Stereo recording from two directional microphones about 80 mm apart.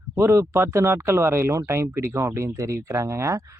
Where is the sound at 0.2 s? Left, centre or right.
Right.